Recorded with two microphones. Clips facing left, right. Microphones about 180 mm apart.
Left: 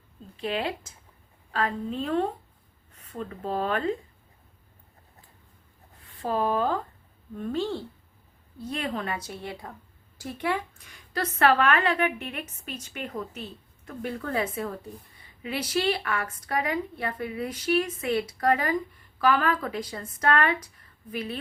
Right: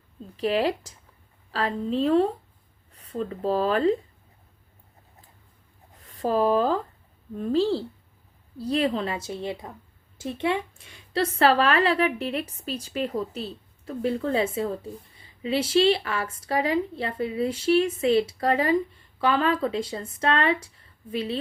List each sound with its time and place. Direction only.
0.3 s a woman's voice: 35° right (ahead or behind)
6.1 s a woman's voice: 40° right (ahead or behind)